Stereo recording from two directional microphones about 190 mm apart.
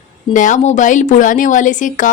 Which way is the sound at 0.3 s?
40° left (ahead or behind).